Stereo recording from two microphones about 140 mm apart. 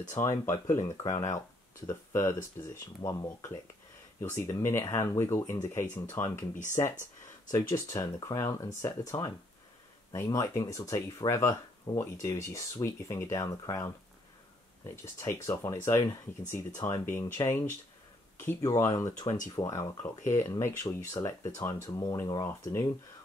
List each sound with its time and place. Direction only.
0.2 s speech: 20° left (ahead or behind)
6.5 s speech: 60° left (ahead or behind)
7.5 s speech: 20° left (ahead or behind)
15.1 s speech: 20° left (ahead or behind)
19.2 s speech: 65° left (ahead or behind)
19.5 s speech: 25° left (ahead or behind)